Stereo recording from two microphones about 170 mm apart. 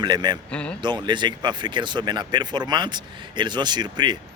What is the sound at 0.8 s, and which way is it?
Speech, 25° right (ahead or behind).